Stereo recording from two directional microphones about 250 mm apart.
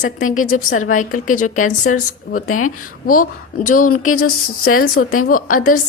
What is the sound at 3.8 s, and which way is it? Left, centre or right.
Speech, left.